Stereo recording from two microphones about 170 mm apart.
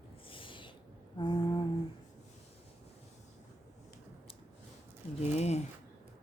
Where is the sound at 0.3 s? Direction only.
30° left (ahead or behind).